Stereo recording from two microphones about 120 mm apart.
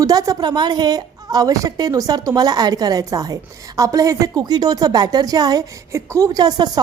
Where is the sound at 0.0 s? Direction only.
30° right (ahead or behind).